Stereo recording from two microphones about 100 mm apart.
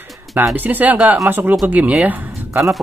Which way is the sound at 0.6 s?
15° right (ahead or behind).